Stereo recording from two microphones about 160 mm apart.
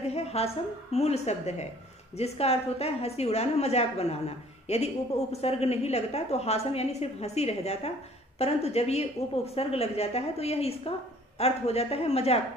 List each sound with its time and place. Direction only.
0.0 s music: 40° left (ahead or behind)
0.9 s a woman's voice: 40° left (ahead or behind)